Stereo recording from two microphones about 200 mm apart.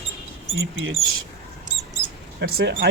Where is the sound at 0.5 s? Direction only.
80° right.